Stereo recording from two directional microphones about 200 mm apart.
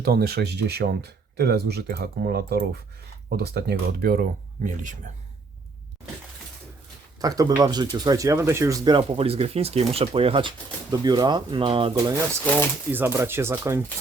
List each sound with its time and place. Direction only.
0.0 s speech: 50° right (ahead or behind)
7.2 s speech: 20° right (ahead or behind)
12.9 s speech: 10° right (ahead or behind)